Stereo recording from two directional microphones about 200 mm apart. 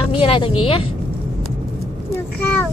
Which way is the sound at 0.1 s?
25° left (ahead or behind).